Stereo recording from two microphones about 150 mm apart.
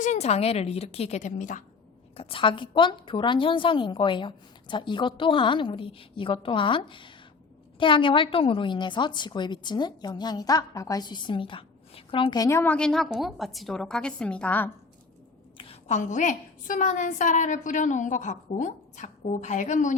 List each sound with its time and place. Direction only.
0.0 s a woman's voice: 50° left (ahead or behind)
2.1 s a woman's voice: 35° left (ahead or behind); by 12.7 s 20° left (ahead or behind)
12.7 s a woman's voice: 5° left (ahead or behind)
15.5 s a woman's voice: 40° left (ahead or behind); by 20.0 s 55° left (ahead or behind)